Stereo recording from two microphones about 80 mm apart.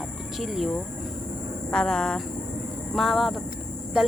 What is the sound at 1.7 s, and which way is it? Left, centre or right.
Speech, centre.